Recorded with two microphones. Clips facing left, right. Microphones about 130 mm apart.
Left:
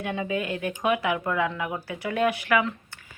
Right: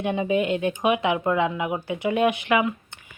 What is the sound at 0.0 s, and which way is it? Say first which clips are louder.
Speech: right 6 dB; 20° right (ahead or behind).